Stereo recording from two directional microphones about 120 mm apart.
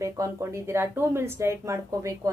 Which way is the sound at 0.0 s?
25° right (ahead or behind).